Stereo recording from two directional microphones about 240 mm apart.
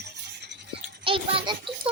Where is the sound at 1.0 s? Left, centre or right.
Right.